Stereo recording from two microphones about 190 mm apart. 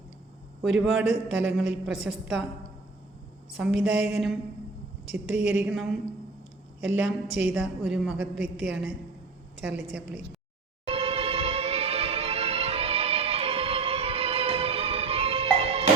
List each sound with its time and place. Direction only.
0.6 s a woman's voice: centre (ahead or behind)
3.5 s a woman's voice: centre (ahead or behind)
10.8 s music: 30° right (ahead or behind)